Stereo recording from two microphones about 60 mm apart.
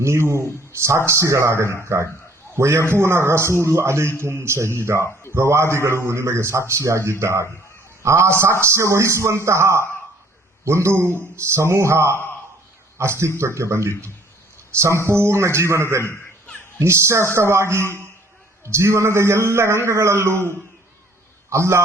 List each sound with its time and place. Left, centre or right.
0.0 s a man's voice: right
21.5 s a man's voice: right